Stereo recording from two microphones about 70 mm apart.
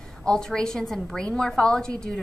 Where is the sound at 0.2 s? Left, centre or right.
Centre.